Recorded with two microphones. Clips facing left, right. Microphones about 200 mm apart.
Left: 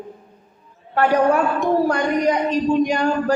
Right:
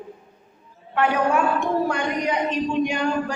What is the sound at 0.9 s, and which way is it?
A woman's voice, 40° left (ahead or behind).